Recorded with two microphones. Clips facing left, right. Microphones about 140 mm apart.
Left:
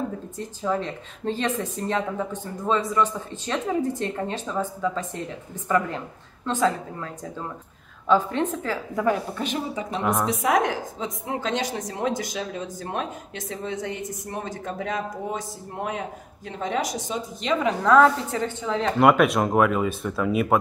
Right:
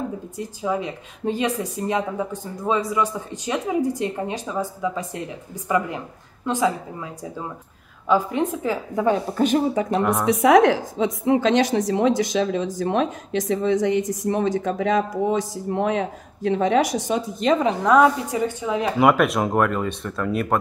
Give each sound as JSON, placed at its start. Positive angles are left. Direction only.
{"t": 0.4, "sound": "speech", "side_deg": -10}
{"t": 9.8, "sound": "speech", "side_deg": 0}
{"t": 10.4, "sound": "a woman's voice", "side_deg": -80}
{"t": 17.4, "sound": "a woman's voice", "side_deg": -45}
{"t": 17.8, "sound": "speech", "side_deg": -15}